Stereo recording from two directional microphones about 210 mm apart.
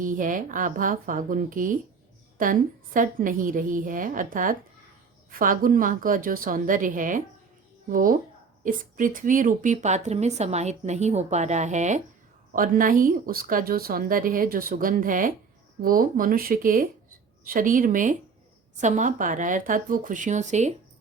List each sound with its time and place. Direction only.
0.0 s speech: 40° right (ahead or behind)